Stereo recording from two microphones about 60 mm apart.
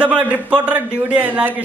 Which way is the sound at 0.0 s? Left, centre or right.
Right.